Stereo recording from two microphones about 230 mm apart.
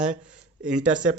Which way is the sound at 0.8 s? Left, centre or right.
Right.